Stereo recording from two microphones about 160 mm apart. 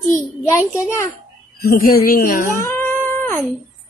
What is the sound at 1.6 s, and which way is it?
Speech, 70° left (ahead or behind).